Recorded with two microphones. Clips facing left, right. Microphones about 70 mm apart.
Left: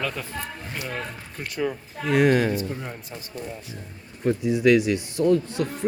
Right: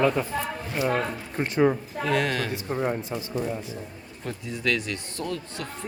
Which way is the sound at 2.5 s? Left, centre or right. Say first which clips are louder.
Right 3 dB; right.